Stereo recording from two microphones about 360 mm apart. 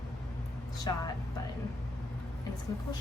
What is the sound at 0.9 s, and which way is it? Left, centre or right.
Speech, centre.